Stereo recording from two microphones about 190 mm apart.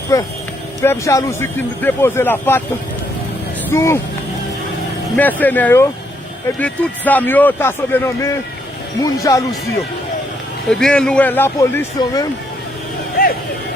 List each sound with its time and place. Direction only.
0.8 s speech: 15° left (ahead or behind)
3.7 s speech: 15° left (ahead or behind)
5.1 s speech: 10° left (ahead or behind)
10.7 s speech: 5° left (ahead or behind); by 12.3 s 20° left (ahead or behind)